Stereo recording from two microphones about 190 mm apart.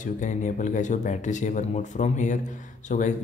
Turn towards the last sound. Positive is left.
turn(degrees=40)  # may be behind; listen again after turning